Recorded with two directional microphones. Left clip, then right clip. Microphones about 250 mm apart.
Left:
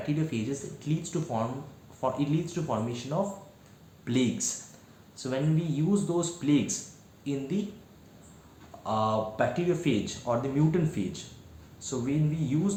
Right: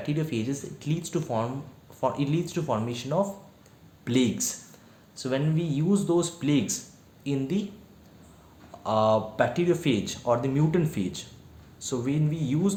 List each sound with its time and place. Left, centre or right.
0.0 s speech: right
8.8 s speech: right